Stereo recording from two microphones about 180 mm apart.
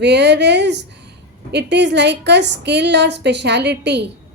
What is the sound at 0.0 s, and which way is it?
A woman's voice, 70° right (ahead or behind).